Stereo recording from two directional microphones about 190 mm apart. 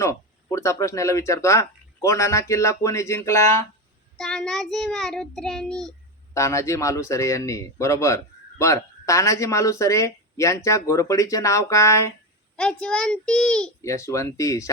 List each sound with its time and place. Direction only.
0.0 s a man's voice: 15° left (ahead or behind)
4.2 s a child's voice: centre (ahead or behind)
6.3 s a man's voice: 15° left (ahead or behind)
12.5 s a child's voice: 5° left (ahead or behind)
13.8 s a man's voice: 15° left (ahead or behind)